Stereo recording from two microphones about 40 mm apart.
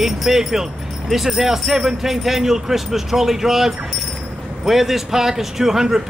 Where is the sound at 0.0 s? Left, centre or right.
Centre.